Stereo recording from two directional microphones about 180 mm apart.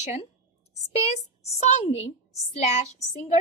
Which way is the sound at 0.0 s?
40° left (ahead or behind).